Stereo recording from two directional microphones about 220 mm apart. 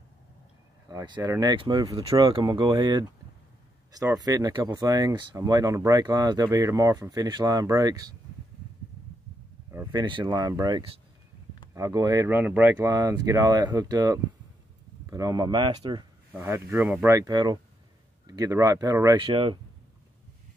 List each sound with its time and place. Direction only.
0.8 s speech: 20° right (ahead or behind)
9.7 s a sound: 10° right (ahead or behind)
10.0 s speech: 20° right (ahead or behind)
16.3 s speech: 10° right (ahead or behind)